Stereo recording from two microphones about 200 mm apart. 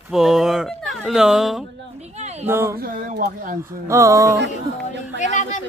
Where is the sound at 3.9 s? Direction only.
15° right (ahead or behind).